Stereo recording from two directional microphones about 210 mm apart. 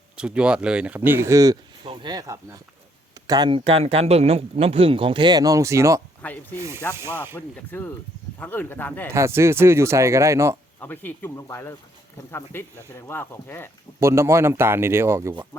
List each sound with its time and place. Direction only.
0.2 s speech: 5° right (ahead or behind)
6.2 s speech: 5° left (ahead or behind)
6.6 s speech: 15° right (ahead or behind)
7.3 s speech: 10° left (ahead or behind)
9.1 s speech: 15° right (ahead or behind)
10.8 s speech: 10° left (ahead or behind)
14.0 s speech: 15° right (ahead or behind)